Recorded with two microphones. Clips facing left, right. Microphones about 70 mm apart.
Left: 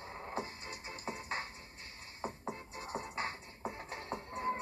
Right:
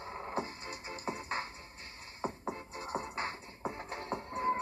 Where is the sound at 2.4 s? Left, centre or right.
Right.